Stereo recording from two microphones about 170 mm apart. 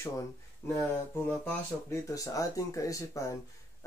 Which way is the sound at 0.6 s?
15° left (ahead or behind).